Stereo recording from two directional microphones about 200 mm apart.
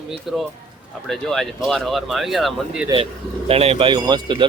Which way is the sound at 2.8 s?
25° right (ahead or behind).